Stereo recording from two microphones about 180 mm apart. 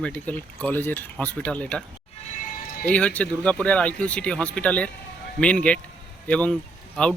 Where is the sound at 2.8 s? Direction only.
5° left (ahead or behind).